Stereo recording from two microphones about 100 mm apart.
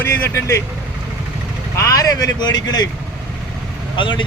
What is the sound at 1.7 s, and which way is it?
Speech, 30° left (ahead or behind).